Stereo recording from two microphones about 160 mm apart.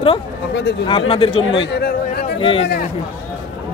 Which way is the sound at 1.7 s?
80° left.